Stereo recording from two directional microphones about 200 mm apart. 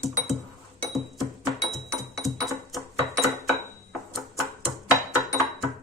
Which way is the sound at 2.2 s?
Centre (ahead or behind).